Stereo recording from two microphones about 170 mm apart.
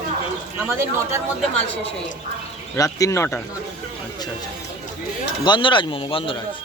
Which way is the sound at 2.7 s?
20° left (ahead or behind).